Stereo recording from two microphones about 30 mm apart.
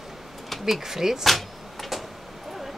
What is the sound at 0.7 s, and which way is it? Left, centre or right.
Speech, centre.